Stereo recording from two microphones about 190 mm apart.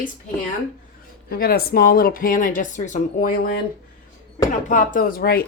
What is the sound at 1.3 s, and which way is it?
Speech, 50° left (ahead or behind).